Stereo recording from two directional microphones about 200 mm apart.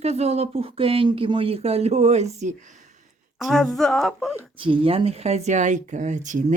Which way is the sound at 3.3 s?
Centre (ahead or behind).